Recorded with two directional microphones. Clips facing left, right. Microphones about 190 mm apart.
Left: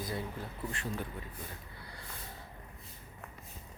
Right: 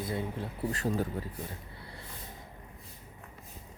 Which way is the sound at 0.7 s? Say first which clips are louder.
Right 10 dB; 40° right (ahead or behind).